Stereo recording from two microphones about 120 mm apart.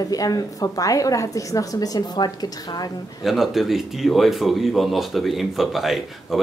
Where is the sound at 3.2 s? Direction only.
Centre (ahead or behind).